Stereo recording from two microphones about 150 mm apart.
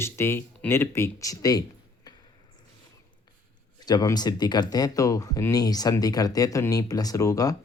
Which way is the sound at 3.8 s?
25° left (ahead or behind).